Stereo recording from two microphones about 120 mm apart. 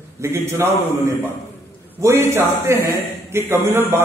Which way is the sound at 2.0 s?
25° right (ahead or behind).